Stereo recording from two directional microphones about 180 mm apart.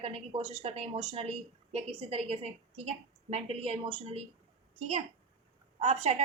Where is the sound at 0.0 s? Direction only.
30° right (ahead or behind).